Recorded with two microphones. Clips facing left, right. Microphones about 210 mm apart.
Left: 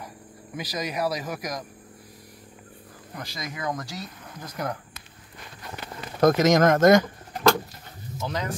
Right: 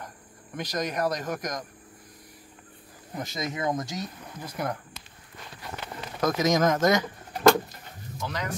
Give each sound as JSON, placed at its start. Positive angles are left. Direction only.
{"t": 0.6, "sound": "speech", "side_deg": 5}
{"t": 3.2, "sound": "speech", "side_deg": -25}
{"t": 4.4, "sound": "speech", "side_deg": -5}
{"t": 6.2, "sound": "speech", "side_deg": 70}
{"t": 8.3, "sound": "speech", "side_deg": 25}